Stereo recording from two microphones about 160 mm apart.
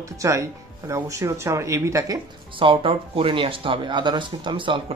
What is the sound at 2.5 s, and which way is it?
Speech, 35° right (ahead or behind).